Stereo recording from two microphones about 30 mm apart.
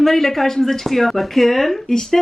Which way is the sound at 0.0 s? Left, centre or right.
Centre.